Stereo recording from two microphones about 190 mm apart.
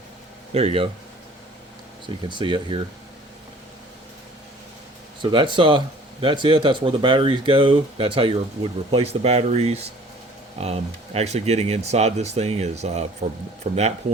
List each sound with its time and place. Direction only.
0.5 s speech: 30° right (ahead or behind)
2.0 s speech: 25° right (ahead or behind)
5.2 s speech: 25° right (ahead or behind)